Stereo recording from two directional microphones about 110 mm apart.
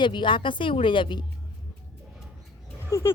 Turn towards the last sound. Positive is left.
turn(degrees=30)  # may be behind; listen again after turning